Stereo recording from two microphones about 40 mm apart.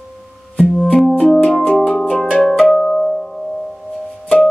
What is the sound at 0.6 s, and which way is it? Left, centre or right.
Music, centre.